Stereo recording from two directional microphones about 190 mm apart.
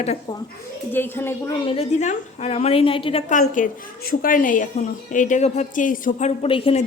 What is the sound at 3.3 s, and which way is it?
A woman's voice, 45° left (ahead or behind).